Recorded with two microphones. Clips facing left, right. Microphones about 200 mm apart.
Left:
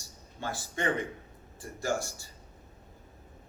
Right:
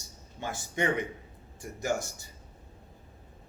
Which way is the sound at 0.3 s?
20° right (ahead or behind).